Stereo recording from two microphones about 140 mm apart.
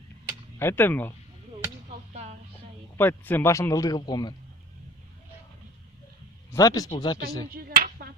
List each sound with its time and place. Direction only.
0.6 s speech: 15° left (ahead or behind)
1.9 s a sound: 50° right (ahead or behind)
3.0 s speech: 15° left (ahead or behind); by 4.4 s 30° left (ahead or behind)
6.5 s speech: 25° left (ahead or behind)
7.5 s clapping: 90° right